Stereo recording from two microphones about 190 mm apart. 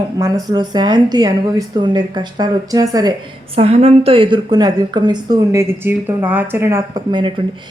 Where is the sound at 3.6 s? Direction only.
30° right (ahead or behind).